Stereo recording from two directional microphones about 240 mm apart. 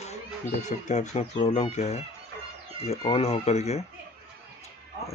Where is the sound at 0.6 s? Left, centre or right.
Left.